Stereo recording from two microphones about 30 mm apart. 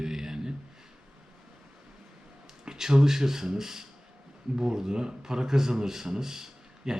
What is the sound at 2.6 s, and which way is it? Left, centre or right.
A man's voice, centre.